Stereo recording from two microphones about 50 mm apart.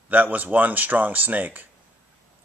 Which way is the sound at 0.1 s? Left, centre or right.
Right.